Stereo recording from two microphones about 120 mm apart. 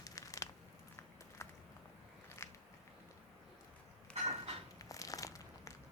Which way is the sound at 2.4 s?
20° left (ahead or behind).